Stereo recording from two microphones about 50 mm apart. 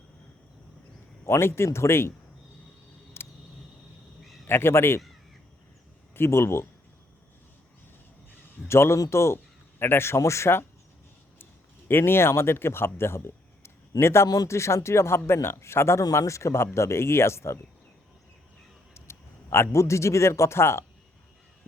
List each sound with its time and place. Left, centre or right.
1.2 s speech: left
3.2 s a sound: left
4.4 s speech: left
6.1 s speech: left
8.6 s speech: left
11.9 s speech: left
16.7 s speech: left
18.9 s a sound: left
19.7 s speech: left